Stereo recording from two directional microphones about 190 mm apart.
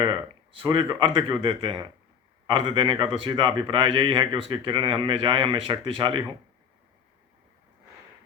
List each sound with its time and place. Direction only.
0.5 s speech: 25° right (ahead or behind)